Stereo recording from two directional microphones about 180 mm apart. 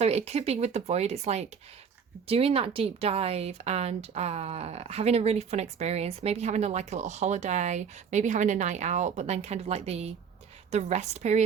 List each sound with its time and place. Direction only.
0.0 s speech: 35° right (ahead or behind)